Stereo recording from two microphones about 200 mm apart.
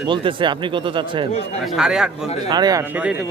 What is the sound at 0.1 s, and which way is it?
Speech, 25° right (ahead or behind).